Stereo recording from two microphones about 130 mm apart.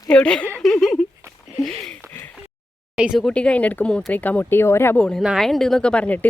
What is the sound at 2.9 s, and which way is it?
Speech, 5° right (ahead or behind).